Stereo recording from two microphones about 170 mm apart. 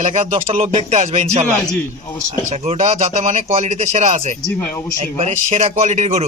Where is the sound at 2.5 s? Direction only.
40° right (ahead or behind).